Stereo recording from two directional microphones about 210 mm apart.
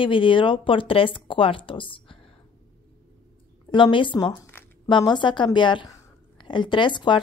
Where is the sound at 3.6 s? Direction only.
25° left (ahead or behind).